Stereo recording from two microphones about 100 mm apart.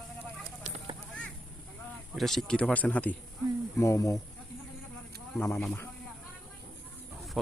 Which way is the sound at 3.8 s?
30° left (ahead or behind).